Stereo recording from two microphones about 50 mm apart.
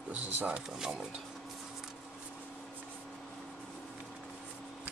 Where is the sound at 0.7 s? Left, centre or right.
Centre.